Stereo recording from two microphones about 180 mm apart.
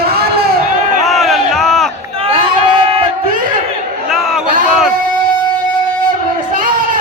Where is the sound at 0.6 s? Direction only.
40° right (ahead or behind).